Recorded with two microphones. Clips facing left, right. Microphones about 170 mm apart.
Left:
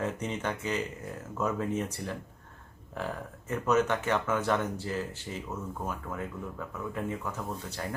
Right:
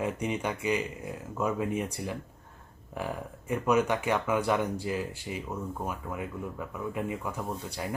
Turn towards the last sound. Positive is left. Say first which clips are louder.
# right 2 dB
turn(degrees=-10)  # may be behind; listen again after turning